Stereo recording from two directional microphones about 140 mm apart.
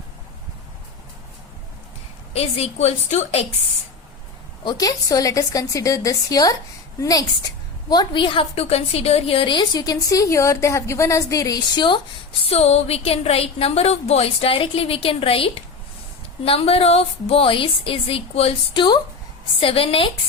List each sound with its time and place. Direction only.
2.3 s a woman's voice: 45° left (ahead or behind)
4.6 s a woman's voice: 25° left (ahead or behind)
12.4 s a woman's voice: 50° left (ahead or behind)